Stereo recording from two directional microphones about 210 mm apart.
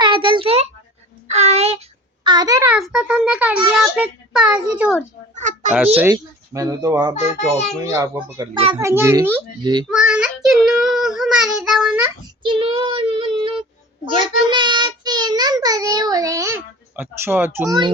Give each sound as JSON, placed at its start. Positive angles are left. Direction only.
{"t": 0.0, "sound": "a child's voice", "side_deg": -25}
{"t": 1.3, "sound": "child singing", "side_deg": -30}
{"t": 2.2, "sound": "a child's voice", "side_deg": -20}
{"t": 2.7, "sound": "a child's voice", "side_deg": -5}
{"t": 5.3, "sound": "a sound", "side_deg": -35}
{"t": 6.0, "sound": "child singing", "side_deg": -15}
{"t": 7.2, "sound": "a child's voice", "side_deg": 30}
{"t": 7.9, "sound": "child singing", "side_deg": -15}
{"t": 8.5, "sound": "a child's voice", "side_deg": -25}
{"t": 8.8, "sound": "child singing", "side_deg": -15}
{"t": 9.9, "sound": "a child's voice", "side_deg": -5}
{"t": 12.4, "sound": "child singing", "side_deg": -25}